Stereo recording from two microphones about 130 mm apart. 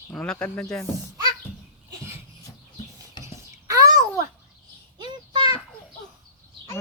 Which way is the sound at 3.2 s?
25° right (ahead or behind).